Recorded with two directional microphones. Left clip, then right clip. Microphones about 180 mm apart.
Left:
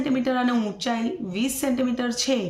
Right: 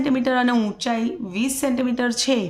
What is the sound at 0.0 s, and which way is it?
A woman's voice, 35° right (ahead or behind).